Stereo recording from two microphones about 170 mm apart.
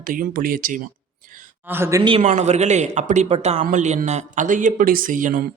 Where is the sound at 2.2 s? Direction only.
45° right (ahead or behind).